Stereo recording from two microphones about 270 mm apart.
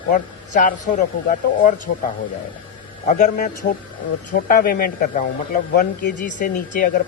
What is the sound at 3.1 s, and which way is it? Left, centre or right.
Speech, left.